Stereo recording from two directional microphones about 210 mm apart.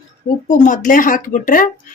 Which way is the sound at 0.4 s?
35° left (ahead or behind).